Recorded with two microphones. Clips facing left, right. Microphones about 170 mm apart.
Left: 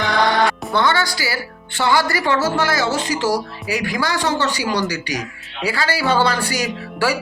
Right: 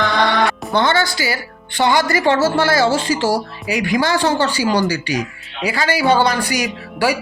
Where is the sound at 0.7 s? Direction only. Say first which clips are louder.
Right 2 dB; 25° right (ahead or behind).